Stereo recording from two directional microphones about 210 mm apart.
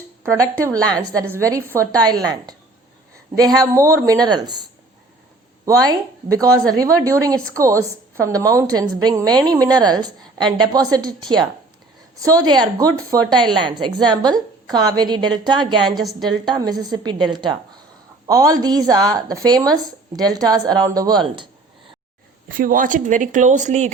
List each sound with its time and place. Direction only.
0.2 s a woman's voice: 15° right (ahead or behind)
16.0 s a woman's voice: centre (ahead or behind)
16.5 s a woman's voice: 20° right (ahead or behind)
22.4 s speech: 40° right (ahead or behind)